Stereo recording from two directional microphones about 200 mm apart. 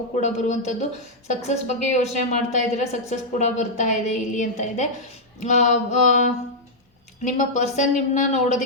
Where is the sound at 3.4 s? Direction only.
35° left (ahead or behind).